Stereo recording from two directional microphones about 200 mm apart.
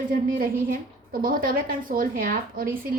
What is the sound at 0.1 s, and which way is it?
A woman's voice, 45° right (ahead or behind).